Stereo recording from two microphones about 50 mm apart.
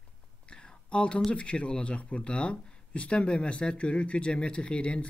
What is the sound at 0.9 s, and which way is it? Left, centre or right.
Speech, left.